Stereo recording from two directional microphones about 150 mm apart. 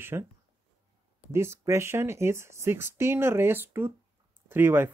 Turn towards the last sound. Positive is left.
turn(degrees=-15)  # may be behind; listen again after turning